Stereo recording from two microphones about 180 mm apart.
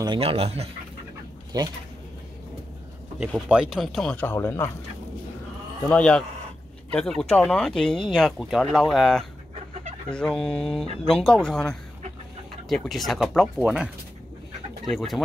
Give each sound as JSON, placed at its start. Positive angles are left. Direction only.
{"t": 0.0, "sound": "speech", "side_deg": -25}
{"t": 1.5, "sound": "speech", "side_deg": -20}
{"t": 3.4, "sound": "speech", "side_deg": -5}
{"t": 5.9, "sound": "speech", "side_deg": 5}
{"t": 14.9, "sound": "speech", "side_deg": 0}